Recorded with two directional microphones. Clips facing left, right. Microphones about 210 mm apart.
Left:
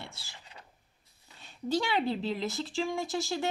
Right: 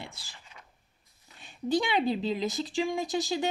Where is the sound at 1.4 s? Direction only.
15° right (ahead or behind).